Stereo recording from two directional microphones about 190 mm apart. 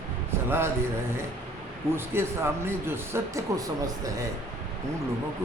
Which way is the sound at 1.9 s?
10° right (ahead or behind).